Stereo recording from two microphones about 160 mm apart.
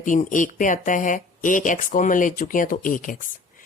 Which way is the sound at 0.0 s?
55° left (ahead or behind).